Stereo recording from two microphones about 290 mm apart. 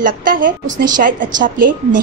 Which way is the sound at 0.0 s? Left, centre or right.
Right.